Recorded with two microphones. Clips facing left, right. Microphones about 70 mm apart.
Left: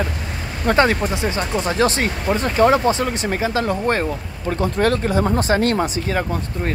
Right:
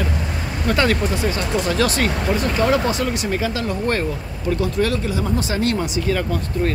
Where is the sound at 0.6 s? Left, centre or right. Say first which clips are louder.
Left 3 dB; left.